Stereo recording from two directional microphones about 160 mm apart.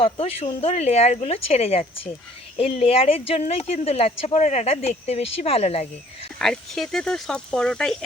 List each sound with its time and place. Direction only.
0.0 s a woman's voice: 40° left (ahead or behind)
6.4 s speech: centre (ahead or behind)